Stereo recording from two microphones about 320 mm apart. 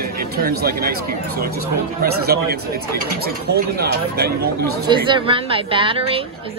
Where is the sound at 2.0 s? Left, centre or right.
Right.